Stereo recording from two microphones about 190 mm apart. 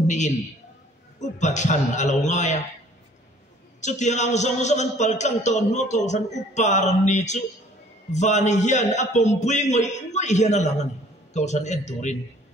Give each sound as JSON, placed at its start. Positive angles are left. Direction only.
{"t": 0.0, "sound": "a man's voice", "side_deg": 40}
{"t": 1.4, "sound": "a man's voice", "side_deg": 40}
{"t": 3.8, "sound": "a man's voice", "side_deg": 40}